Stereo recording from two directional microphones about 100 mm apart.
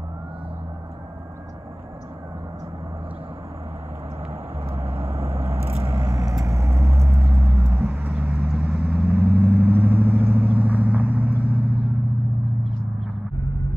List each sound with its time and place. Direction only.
4.7 s vehicle: 20° right (ahead or behind)